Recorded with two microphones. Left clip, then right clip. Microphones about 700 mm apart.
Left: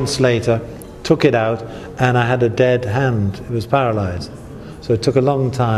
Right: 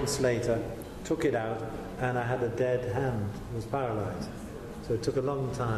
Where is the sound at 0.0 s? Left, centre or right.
Left.